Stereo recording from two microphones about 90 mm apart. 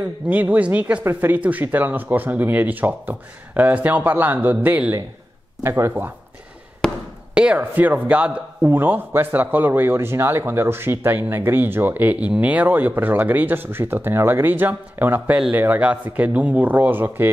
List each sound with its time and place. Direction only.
0.3 s speech: 20° right (ahead or behind)
5.6 s speech: 30° right (ahead or behind)
6.8 s basketball bounce: 5° left (ahead or behind)
7.3 s speech: 15° right (ahead or behind)